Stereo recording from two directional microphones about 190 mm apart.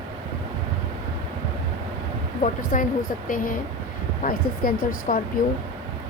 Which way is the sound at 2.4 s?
45° left (ahead or behind).